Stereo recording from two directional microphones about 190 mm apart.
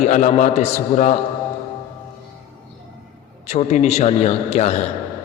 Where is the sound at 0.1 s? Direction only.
45° left (ahead or behind).